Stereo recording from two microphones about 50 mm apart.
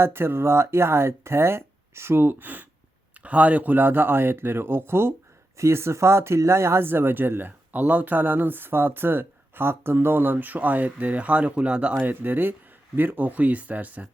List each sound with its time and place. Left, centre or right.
0.0 s speech: right
6.8 s speech: right
11.9 s speech: right